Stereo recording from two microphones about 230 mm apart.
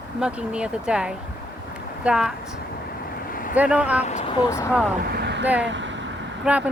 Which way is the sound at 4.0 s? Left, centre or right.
Left.